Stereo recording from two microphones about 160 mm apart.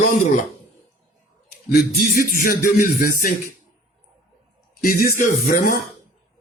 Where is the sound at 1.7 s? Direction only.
65° left (ahead or behind).